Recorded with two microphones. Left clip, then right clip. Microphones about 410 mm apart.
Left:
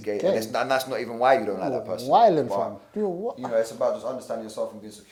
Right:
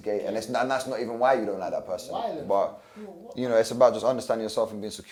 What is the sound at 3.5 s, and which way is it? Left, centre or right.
Speech, right.